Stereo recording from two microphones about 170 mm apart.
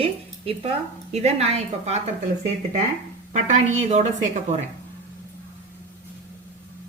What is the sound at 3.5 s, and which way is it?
A woman's voice, 45° right (ahead or behind).